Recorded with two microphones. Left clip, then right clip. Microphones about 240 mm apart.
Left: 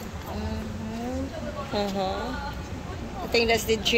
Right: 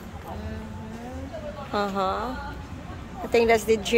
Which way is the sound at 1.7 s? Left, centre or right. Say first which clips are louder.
Right 3 dB; centre.